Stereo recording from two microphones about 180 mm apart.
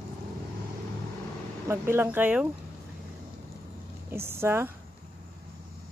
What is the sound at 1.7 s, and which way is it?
Speech, 15° right (ahead or behind).